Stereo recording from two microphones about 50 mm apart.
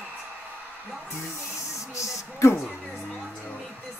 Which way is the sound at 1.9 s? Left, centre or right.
Left.